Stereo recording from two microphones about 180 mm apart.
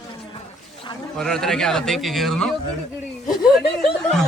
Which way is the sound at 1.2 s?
5° left (ahead or behind).